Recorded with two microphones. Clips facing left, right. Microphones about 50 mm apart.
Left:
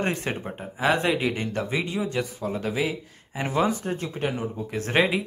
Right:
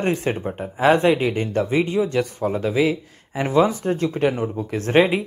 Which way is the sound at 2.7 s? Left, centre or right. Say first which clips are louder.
Right 7 dB; right.